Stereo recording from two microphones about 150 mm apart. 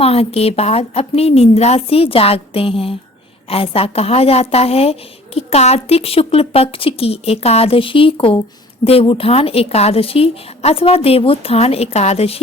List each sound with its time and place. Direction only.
0.0 s a woman's voice: 40° left (ahead or behind)